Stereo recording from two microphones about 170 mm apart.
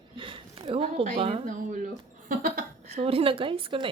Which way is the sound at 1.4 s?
50° right (ahead or behind).